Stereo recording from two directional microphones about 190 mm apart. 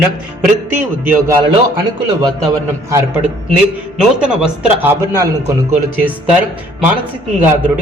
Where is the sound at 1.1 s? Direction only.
20° right (ahead or behind).